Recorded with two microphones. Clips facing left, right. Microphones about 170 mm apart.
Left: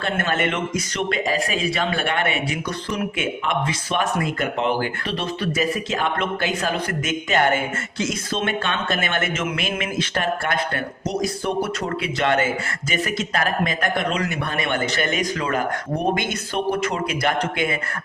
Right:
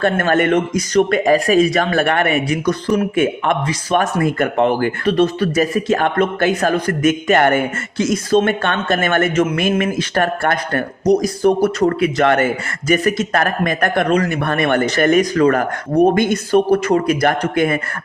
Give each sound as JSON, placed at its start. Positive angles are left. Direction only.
{"t": 0.0, "sound": "speech", "side_deg": -50}
{"t": 8.0, "sound": "speech", "side_deg": -45}
{"t": 12.9, "sound": "speech", "side_deg": -45}